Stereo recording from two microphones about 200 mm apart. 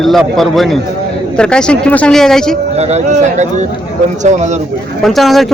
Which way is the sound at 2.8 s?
35° right (ahead or behind).